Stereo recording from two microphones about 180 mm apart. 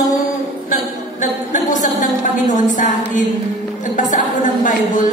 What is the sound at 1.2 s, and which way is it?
A woman's voice, 45° left (ahead or behind).